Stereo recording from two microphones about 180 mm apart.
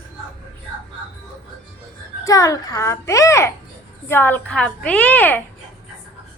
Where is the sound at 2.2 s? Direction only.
20° left (ahead or behind).